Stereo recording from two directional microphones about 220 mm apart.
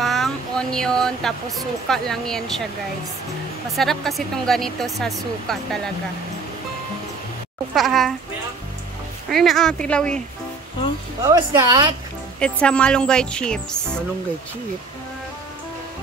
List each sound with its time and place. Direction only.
0.0 s speech: centre (ahead or behind)
3.7 s speech: centre (ahead or behind)
7.7 s speech: centre (ahead or behind)
9.3 s speech: centre (ahead or behind)
11.2 s speech: 15° right (ahead or behind)
12.4 s speech: 5° left (ahead or behind)